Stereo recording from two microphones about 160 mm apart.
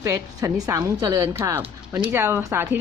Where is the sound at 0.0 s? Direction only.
20° right (ahead or behind).